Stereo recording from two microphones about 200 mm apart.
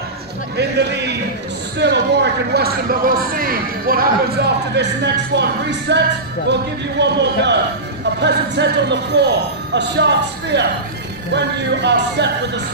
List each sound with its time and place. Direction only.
0.6 s speech: 60° right (ahead or behind)
1.8 s a sound: 60° right (ahead or behind)
4.7 s speech: 60° right (ahead or behind)